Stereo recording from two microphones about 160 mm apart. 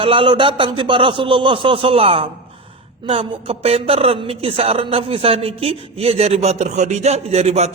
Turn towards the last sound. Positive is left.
turn(degrees=-40)  # may be behind; listen again after turning